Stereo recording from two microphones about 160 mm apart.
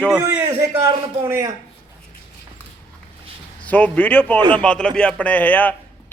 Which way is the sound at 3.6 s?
10° left (ahead or behind).